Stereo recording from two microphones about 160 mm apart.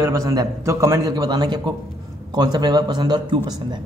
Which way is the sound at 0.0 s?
20° right (ahead or behind).